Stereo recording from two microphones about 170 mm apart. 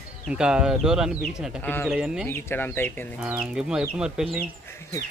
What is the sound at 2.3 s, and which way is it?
Speech, 10° left (ahead or behind).